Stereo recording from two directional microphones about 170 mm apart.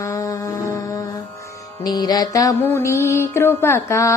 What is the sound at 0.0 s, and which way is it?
Music, 20° left (ahead or behind).